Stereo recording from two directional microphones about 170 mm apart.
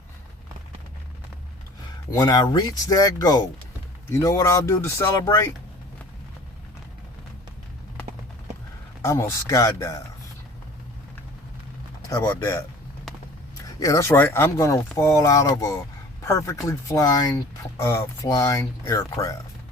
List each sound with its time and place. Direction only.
2.1 s speech: 25° left (ahead or behind)
9.0 s speech: 15° left (ahead or behind)
12.1 s speech: 15° left (ahead or behind)
13.7 s speech: 20° left (ahead or behind)